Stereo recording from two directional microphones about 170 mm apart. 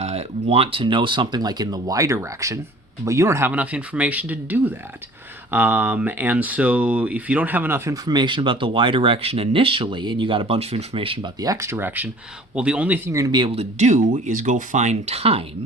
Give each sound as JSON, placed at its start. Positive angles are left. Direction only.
{"t": 0.0, "sound": "speech", "side_deg": -35}
{"t": 8.0, "sound": "speech", "side_deg": -25}